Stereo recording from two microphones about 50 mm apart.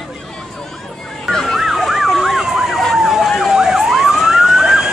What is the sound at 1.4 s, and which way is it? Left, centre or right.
Emergency vehicle, centre.